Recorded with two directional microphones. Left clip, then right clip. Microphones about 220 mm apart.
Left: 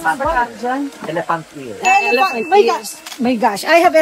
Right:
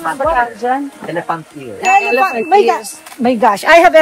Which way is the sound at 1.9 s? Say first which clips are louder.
Right 2 dB; 45° right (ahead or behind).